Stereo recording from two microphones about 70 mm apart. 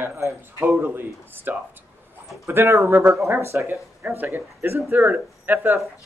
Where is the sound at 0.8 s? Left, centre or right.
Right.